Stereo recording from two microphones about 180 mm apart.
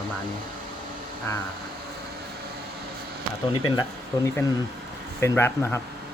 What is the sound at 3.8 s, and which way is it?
Speech, 15° left (ahead or behind).